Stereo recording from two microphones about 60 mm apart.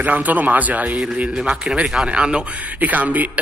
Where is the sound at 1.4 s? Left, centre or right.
Centre.